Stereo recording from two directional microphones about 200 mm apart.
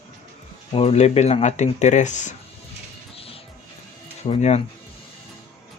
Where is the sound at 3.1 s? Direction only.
30° left (ahead or behind).